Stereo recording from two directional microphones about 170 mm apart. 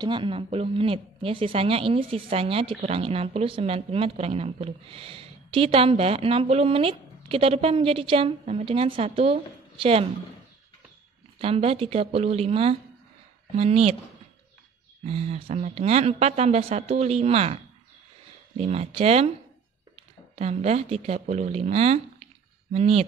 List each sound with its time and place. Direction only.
0.0 s a woman's voice: 30° right (ahead or behind)
11.3 s a woman's voice: 35° right (ahead or behind)
15.0 s a woman's voice: 35° right (ahead or behind)
18.6 s a woman's voice: 35° right (ahead or behind)
20.3 s a woman's voice: 40° right (ahead or behind)